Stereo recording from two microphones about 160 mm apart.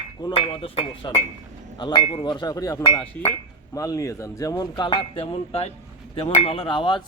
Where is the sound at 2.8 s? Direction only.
35° left (ahead or behind).